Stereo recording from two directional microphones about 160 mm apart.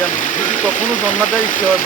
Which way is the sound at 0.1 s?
55° left (ahead or behind).